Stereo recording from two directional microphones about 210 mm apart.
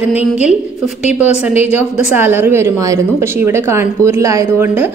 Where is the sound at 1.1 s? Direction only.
10° right (ahead or behind).